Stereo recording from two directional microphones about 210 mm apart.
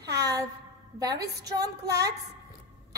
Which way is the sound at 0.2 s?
15° right (ahead or behind).